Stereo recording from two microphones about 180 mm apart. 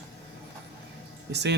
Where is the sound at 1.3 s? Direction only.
65° right (ahead or behind).